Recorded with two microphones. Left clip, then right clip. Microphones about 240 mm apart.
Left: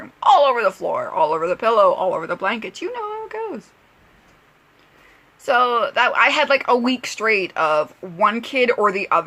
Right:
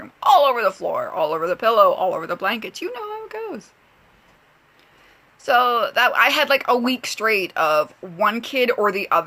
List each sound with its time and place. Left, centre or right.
0.0 s speech: centre
5.5 s speech: centre